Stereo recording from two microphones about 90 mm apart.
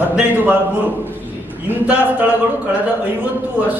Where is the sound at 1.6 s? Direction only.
20° right (ahead or behind).